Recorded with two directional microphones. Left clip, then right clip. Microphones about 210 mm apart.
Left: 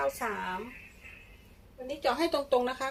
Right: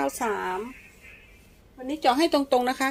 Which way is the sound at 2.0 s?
40° right (ahead or behind).